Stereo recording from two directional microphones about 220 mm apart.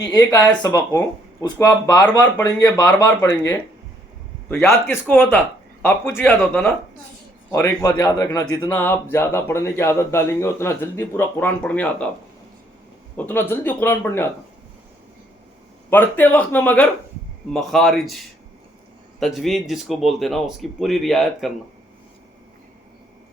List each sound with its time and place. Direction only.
0.1 s speech: 15° left (ahead or behind)
13.1 s speech: 10° left (ahead or behind)
15.9 s speech: 10° left (ahead or behind)
19.2 s speech: centre (ahead or behind)